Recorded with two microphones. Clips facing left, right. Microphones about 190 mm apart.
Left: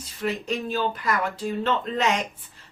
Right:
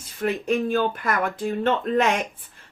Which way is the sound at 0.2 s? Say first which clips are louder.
Right 5 dB; 55° right (ahead or behind).